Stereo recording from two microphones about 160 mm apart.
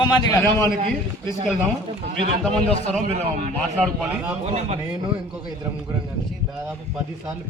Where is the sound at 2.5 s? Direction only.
45° right (ahead or behind).